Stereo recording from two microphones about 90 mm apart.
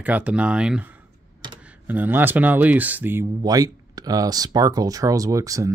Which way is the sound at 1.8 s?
20° right (ahead or behind).